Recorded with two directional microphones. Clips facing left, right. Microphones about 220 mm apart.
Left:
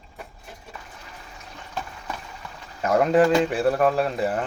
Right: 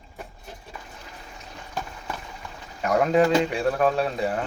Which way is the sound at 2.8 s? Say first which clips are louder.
Left 2 dB; centre (ahead or behind).